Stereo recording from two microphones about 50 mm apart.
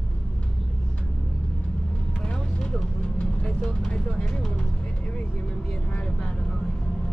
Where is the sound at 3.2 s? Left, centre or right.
Centre.